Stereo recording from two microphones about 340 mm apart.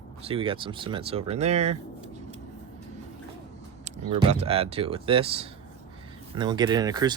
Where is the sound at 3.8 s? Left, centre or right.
Centre.